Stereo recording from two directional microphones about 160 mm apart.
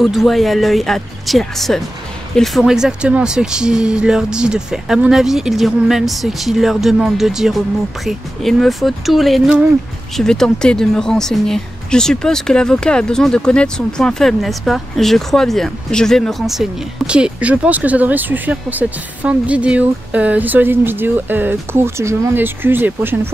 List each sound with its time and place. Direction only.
0.0 s a woman's voice: centre (ahead or behind)